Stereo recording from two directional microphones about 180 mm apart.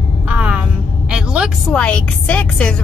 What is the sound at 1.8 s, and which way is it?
Speech, 5° left (ahead or behind).